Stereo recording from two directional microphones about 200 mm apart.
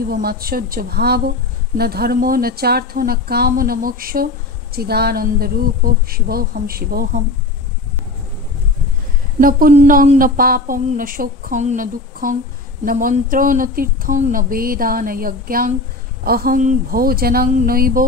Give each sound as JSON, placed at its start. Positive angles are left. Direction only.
{"t": 0.1, "sound": "speech", "side_deg": -50}
{"t": 9.4, "sound": "speech", "side_deg": -45}